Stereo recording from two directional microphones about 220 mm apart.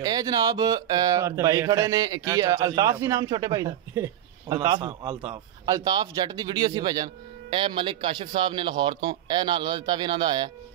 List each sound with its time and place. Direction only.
0.0 s speech: 15° right (ahead or behind)